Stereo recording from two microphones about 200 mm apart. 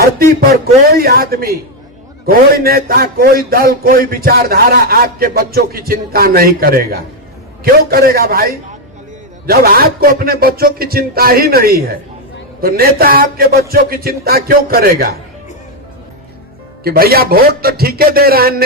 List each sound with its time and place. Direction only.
0.0 s a man's voice: 50° right (ahead or behind)
16.8 s a man's voice: 50° right (ahead or behind)